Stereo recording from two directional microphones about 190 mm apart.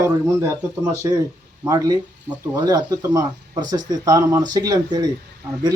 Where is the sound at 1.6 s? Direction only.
15° right (ahead or behind).